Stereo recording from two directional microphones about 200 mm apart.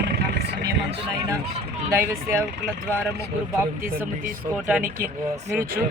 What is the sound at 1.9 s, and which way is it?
Speech, 15° right (ahead or behind).